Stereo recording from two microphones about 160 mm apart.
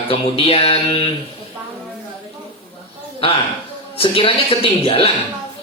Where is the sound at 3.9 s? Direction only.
35° left (ahead or behind).